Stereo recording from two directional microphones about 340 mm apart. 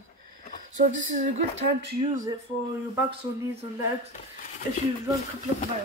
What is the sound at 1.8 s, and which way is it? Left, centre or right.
Speech, right.